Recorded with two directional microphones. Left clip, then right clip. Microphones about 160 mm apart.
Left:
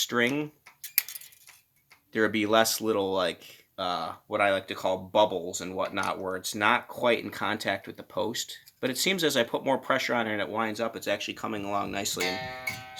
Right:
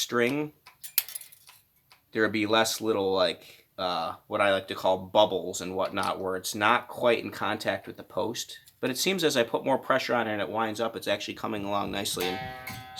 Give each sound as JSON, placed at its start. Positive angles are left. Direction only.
{"t": 0.0, "sound": "speech", "side_deg": 30}
{"t": 2.1, "sound": "speech", "side_deg": 30}